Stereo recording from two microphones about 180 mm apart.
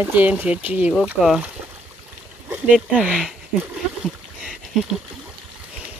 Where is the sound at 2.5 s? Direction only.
5° right (ahead or behind).